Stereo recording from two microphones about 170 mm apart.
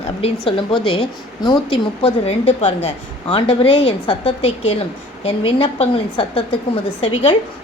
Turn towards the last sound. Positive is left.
turn(degrees=30)  # may be behind; listen again after turning